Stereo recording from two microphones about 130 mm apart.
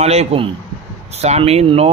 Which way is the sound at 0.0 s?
55° right (ahead or behind).